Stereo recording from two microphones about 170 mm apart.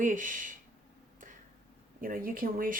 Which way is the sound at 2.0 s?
55° right (ahead or behind).